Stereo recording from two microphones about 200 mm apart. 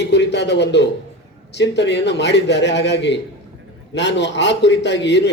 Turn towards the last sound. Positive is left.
turn(degrees=60)  # may be behind; listen again after turning